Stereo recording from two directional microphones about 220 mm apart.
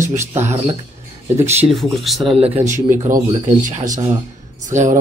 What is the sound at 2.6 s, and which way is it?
Speech, 35° right (ahead or behind).